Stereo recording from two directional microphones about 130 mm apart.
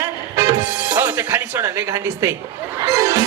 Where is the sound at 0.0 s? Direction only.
25° right (ahead or behind).